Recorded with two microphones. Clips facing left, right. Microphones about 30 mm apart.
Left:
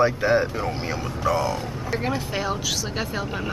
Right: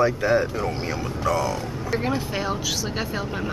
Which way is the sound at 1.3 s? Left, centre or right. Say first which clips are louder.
Even; centre.